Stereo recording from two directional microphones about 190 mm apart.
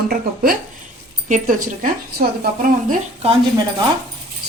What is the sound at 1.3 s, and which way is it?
Speech, 45° right (ahead or behind).